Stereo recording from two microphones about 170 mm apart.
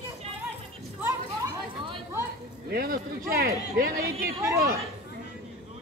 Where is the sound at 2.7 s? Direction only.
65° right (ahead or behind).